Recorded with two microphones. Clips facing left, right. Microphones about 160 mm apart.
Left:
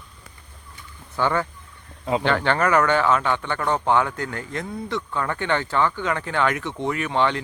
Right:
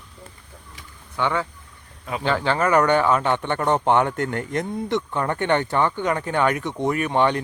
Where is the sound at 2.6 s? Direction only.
30° right (ahead or behind).